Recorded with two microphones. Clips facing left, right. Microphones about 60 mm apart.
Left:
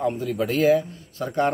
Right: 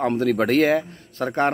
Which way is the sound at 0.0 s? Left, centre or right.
Right.